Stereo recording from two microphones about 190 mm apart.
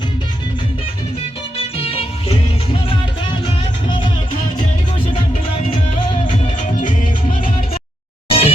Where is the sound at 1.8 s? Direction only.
30° left (ahead or behind).